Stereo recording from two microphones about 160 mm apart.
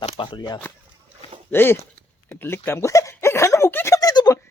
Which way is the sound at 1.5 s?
15° left (ahead or behind).